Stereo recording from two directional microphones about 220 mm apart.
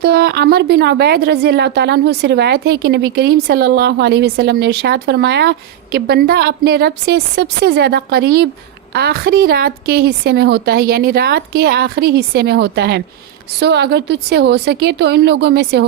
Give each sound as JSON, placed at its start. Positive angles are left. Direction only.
{"t": 0.0, "sound": "a woman's voice", "side_deg": -45}